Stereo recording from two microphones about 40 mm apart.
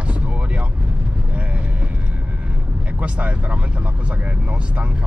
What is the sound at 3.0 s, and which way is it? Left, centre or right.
Speech, right.